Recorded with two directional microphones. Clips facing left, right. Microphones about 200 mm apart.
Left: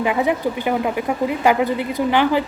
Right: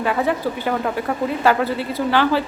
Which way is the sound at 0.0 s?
15° left (ahead or behind).